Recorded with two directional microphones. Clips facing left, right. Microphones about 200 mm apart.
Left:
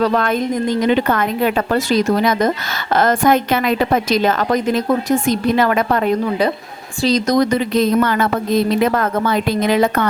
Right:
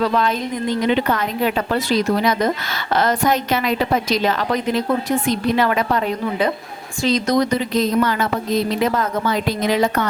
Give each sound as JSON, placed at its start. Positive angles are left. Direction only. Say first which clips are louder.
{"t": 0.0, "sound": "a woman's voice", "louder": "left 3 dB", "side_deg": 50}
{"t": 7.0, "sound": "a woman's voice", "louder": "left 3 dB", "side_deg": 40}
{"t": 7.8, "sound": "a woman's voice", "louder": "left 3 dB", "side_deg": 55}